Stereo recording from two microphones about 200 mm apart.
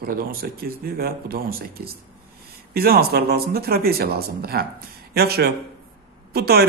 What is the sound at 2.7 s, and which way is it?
Speech, 50° right (ahead or behind).